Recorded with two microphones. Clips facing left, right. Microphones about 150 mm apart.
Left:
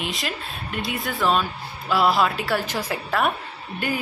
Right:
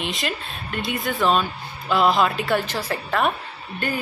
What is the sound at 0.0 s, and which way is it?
Speech, centre (ahead or behind).